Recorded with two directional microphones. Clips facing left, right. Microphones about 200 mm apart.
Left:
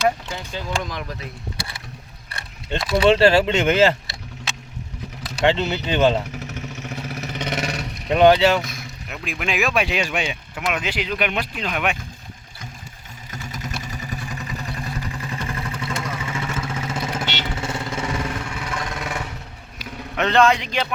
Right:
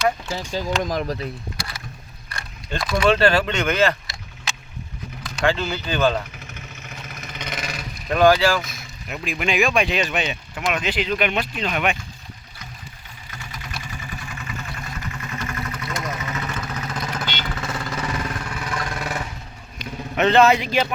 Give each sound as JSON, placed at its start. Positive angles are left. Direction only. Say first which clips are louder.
{"t": 0.3, "sound": "speech", "louder": "right 3 dB", "side_deg": -40}
{"t": 2.3, "sound": "keys jangling", "louder": "left 2 dB", "side_deg": 25}
{"t": 2.9, "sound": "speech", "louder": "left 3 dB", "side_deg": 30}
{"t": 5.5, "sound": "speech", "louder": "left 2 dB", "side_deg": 25}
{"t": 6.4, "sound": "vehicle", "louder": "left 8 dB", "side_deg": 75}
{"t": 8.0, "sound": "speech", "louder": "left 2 dB", "side_deg": 25}
{"t": 8.6, "sound": "speech", "louder": "left 3 dB", "side_deg": 0}
{"t": 13.3, "sound": "vehicle", "louder": "left 5 dB", "side_deg": 45}
{"t": 18.8, "sound": "vehicle", "louder": "right 1 dB", "side_deg": 0}
{"t": 20.1, "sound": "speech", "louder": "right 2 dB", "side_deg": -5}